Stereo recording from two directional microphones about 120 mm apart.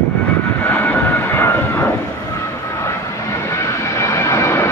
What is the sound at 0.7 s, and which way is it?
Vehicle, 15° left (ahead or behind).